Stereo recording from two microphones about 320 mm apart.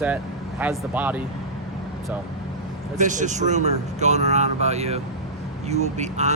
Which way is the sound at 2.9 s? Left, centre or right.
Right.